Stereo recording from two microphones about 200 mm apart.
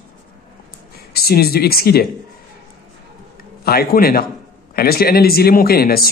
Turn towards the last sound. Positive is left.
turn(degrees=50)  # may be behind; listen again after turning